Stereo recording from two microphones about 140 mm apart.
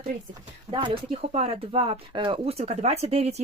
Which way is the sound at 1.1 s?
50° right (ahead or behind).